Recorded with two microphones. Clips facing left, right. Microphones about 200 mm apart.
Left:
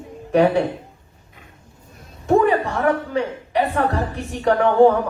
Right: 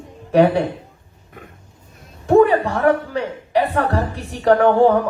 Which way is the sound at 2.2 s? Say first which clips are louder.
Right 3 dB; 35° right (ahead or behind).